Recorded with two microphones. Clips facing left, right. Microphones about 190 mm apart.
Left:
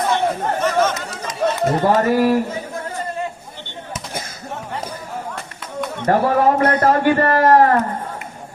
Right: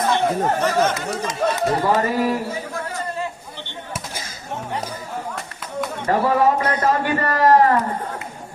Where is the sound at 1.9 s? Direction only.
60° left (ahead or behind).